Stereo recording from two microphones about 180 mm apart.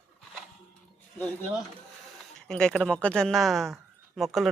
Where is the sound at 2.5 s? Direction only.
5° left (ahead or behind).